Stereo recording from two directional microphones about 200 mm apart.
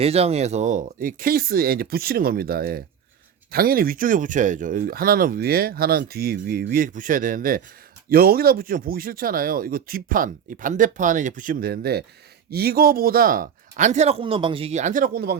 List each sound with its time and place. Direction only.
0.0 s speech: 30° right (ahead or behind); by 15.4 s 50° right (ahead or behind)